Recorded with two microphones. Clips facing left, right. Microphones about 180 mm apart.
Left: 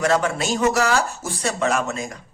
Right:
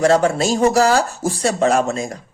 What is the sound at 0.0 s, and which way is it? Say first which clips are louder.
Speech: right 6 dB; 30° right (ahead or behind).